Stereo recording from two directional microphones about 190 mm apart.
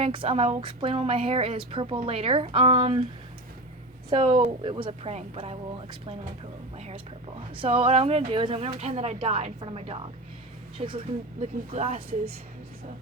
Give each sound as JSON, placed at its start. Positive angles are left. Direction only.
{"t": 0.0, "sound": "a woman's voice", "side_deg": -30}
{"t": 4.1, "sound": "a woman's voice", "side_deg": -30}